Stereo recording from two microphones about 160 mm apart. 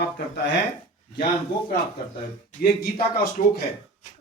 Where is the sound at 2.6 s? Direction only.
80° left.